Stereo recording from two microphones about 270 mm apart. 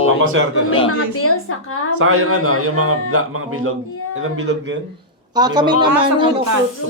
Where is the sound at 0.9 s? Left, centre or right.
Left.